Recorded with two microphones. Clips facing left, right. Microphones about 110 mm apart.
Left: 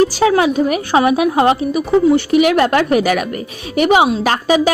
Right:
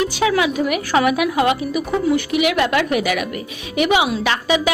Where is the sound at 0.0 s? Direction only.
35° left (ahead or behind).